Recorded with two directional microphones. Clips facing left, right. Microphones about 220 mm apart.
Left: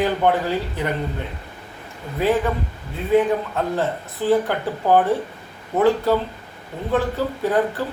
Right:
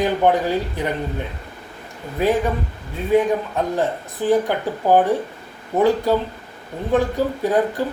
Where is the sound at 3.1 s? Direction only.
15° right (ahead or behind).